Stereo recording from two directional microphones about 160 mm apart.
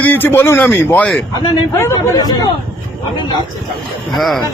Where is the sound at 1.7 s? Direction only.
20° left (ahead or behind).